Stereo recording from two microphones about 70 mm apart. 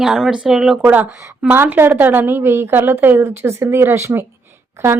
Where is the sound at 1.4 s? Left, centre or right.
Right.